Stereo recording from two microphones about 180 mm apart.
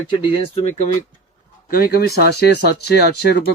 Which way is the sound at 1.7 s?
55° left (ahead or behind).